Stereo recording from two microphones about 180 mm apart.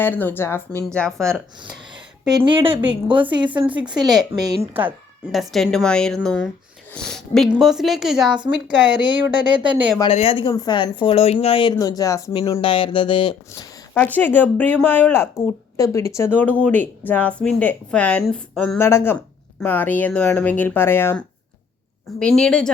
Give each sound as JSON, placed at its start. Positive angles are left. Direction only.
{"t": 0.0, "sound": "speech", "side_deg": 10}
{"t": 0.7, "sound": "speech", "side_deg": -15}
{"t": 0.9, "sound": "a woman's voice", "side_deg": 5}
{"t": 2.3, "sound": "a woman's voice", "side_deg": -25}
{"t": 4.0, "sound": "a woman's voice", "side_deg": 0}
{"t": 5.3, "sound": "a woman's voice", "side_deg": 0}
{"t": 9.1, "sound": "a woman's voice", "side_deg": -25}
{"t": 10.0, "sound": "speech", "side_deg": 30}
{"t": 13.5, "sound": "a woman's voice", "side_deg": 15}